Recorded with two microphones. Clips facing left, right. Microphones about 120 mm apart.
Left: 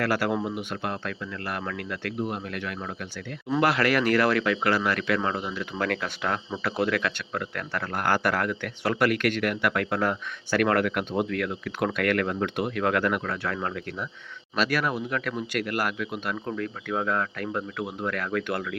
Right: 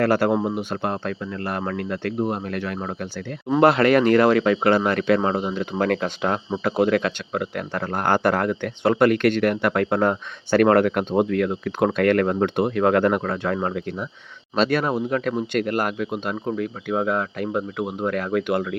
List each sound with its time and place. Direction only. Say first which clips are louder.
0.0 s speech: right 6 dB; 30° right (ahead or behind)